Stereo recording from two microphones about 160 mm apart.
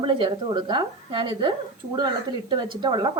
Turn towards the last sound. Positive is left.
turn(degrees=-30)  # may be behind; listen again after turning